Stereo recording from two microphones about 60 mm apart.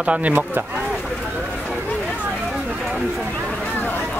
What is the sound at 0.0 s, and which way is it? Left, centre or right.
Speech, right.